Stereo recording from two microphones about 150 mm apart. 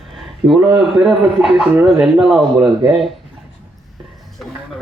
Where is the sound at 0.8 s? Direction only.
Centre (ahead or behind).